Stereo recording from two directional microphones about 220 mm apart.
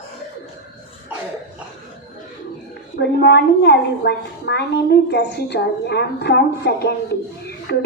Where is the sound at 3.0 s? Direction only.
50° left (ahead or behind).